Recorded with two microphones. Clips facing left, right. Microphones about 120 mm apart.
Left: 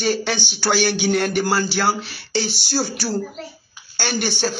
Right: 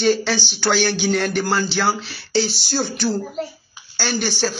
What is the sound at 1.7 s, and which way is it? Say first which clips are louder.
Speech: even; 10° left (ahead or behind).